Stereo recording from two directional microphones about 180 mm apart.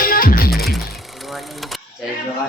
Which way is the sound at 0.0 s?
55° left (ahead or behind).